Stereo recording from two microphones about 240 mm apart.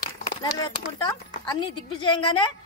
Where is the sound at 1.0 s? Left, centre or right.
Centre.